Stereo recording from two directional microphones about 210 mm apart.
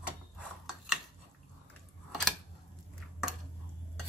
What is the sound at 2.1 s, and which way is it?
Scissors, centre (ahead or behind).